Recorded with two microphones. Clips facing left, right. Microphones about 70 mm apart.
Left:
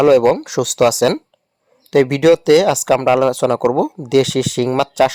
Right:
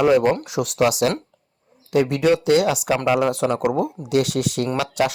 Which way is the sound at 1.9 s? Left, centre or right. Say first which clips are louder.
Left 6 dB; left.